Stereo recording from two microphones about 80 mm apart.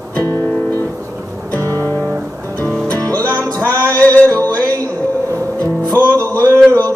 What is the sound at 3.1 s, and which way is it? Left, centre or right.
Music, centre.